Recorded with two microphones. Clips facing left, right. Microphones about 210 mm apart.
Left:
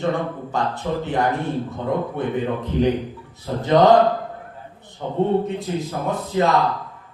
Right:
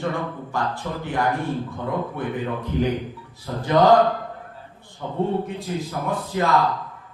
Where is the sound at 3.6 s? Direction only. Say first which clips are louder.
Left 3 dB; 20° left (ahead or behind).